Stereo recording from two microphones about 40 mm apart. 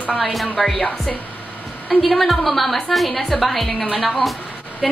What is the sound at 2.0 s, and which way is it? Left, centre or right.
A woman's voice, centre.